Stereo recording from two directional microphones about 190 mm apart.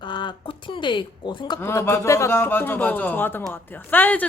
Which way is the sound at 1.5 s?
15° left (ahead or behind).